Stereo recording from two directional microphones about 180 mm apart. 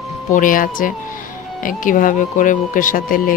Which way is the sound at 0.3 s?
50° left (ahead or behind).